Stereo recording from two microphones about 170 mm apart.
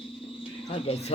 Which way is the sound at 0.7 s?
35° left (ahead or behind).